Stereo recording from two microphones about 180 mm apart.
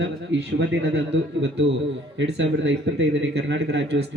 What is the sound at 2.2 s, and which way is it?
Speech, 90° right.